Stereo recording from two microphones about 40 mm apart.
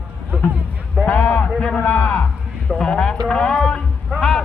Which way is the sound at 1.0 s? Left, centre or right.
Left.